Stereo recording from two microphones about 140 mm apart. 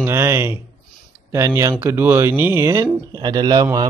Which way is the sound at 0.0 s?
15° right (ahead or behind).